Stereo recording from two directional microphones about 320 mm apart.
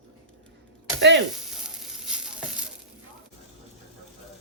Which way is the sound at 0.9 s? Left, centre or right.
Right.